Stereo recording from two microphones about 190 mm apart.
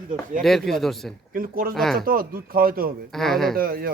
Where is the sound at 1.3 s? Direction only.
50° right (ahead or behind).